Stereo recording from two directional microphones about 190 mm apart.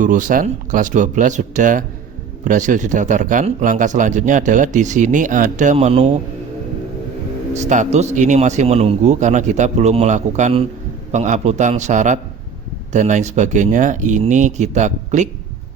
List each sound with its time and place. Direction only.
0.0 s speech: 45° right (ahead or behind)
7.5 s speech: 40° right (ahead or behind)